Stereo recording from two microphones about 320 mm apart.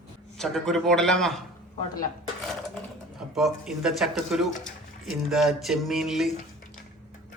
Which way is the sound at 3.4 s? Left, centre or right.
Centre.